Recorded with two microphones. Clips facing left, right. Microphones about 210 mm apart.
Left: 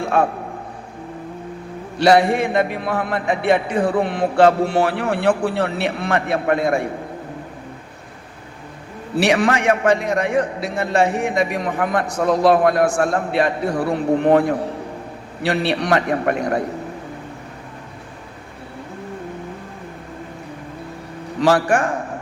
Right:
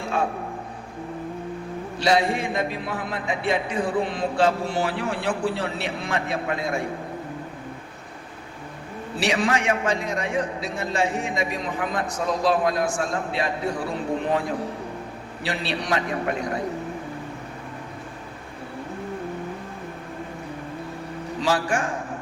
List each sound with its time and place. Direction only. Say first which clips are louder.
0.0 s a sound: left 7 dB; 60° left (ahead or behind)
2.0 s a man's voice: left 7 dB; 65° left (ahead or behind)
9.1 s a man's voice: left 6 dB; 60° left (ahead or behind)
21.4 s a man's voice: left 8 dB; 60° left (ahead or behind)